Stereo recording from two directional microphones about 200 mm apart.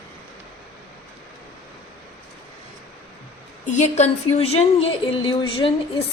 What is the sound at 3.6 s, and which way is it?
A woman's voice, 35° left (ahead or behind).